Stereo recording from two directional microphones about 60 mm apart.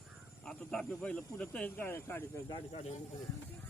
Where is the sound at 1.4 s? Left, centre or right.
Left.